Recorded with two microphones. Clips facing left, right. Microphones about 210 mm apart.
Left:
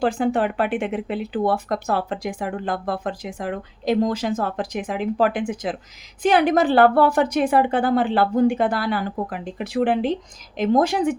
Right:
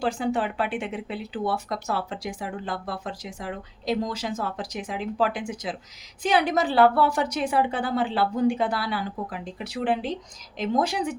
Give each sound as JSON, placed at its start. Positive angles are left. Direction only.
{"t": 0.0, "sound": "speech", "side_deg": 55}